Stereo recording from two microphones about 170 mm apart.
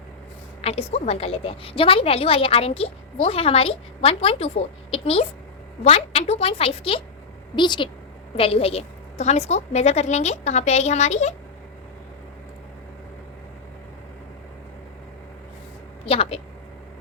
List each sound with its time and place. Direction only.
0.6 s a woman's voice: 35° left (ahead or behind)
16.0 s a woman's voice: 35° left (ahead or behind)